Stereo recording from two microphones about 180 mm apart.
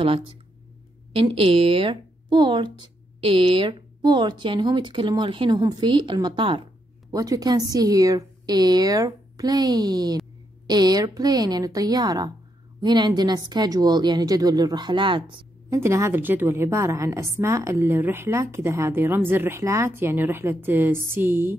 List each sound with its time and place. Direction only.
0.0 s a woman's voice: 30° right (ahead or behind)
15.8 s a woman's voice: 15° right (ahead or behind)